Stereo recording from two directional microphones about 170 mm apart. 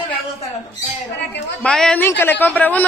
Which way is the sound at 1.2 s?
90° left.